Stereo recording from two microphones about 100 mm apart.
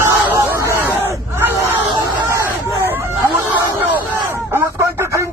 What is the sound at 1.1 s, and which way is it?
Crowd, 25° right (ahead or behind).